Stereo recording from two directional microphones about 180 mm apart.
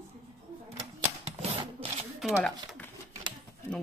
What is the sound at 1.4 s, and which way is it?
Rub, 35° right (ahead or behind).